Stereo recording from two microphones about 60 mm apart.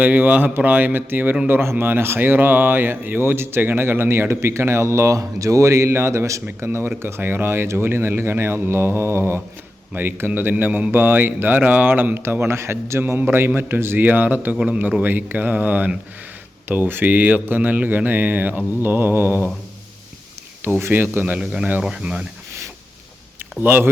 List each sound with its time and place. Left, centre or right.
0.0 s speech: right
13.1 s speech: right
20.8 s speech: right
21.3 s speech: centre
23.6 s speech: right